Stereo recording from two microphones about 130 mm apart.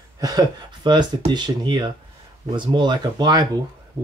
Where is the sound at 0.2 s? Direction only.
30° right (ahead or behind).